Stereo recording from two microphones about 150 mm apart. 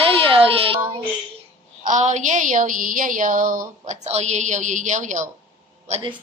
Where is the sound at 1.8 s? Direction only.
55° right (ahead or behind).